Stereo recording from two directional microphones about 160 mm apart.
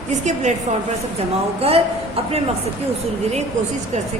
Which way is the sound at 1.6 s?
40° right (ahead or behind).